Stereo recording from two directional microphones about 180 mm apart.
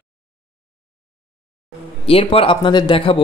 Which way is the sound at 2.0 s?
30° left (ahead or behind).